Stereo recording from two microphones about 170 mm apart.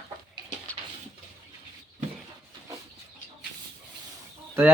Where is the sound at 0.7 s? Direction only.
10° left (ahead or behind).